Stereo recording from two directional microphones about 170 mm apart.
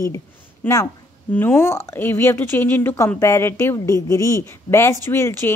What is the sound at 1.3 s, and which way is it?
A woman's voice, 10° left (ahead or behind).